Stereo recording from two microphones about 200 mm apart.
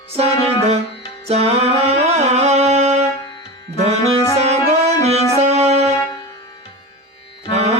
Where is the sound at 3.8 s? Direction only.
30° right (ahead or behind).